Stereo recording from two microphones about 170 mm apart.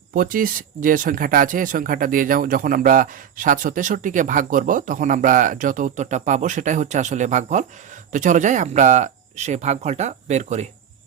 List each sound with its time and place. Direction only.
0.1 s speech: 55° right (ahead or behind)